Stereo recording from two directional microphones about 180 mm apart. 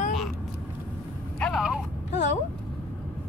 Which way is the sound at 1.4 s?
Centre (ahead or behind).